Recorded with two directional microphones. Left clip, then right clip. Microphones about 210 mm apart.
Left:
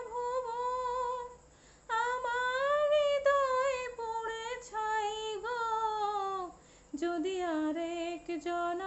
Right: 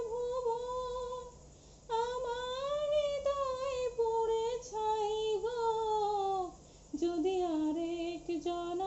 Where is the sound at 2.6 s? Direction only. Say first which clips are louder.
Left 4 dB; 25° left (ahead or behind).